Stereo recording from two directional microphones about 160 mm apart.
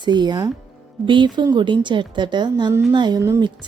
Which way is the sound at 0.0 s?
25° right (ahead or behind).